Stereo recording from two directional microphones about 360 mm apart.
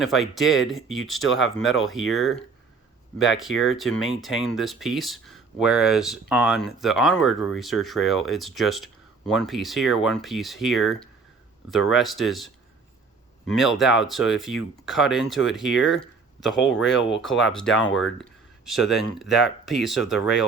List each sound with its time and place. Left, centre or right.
0.0 s speech: centre
0.8 s speech: left
2.1 s speech: centre
3.5 s speech: left
4.2 s speech: centre
13.6 s speech: centre